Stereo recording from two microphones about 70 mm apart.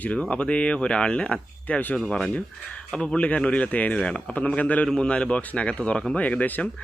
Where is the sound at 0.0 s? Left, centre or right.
Centre.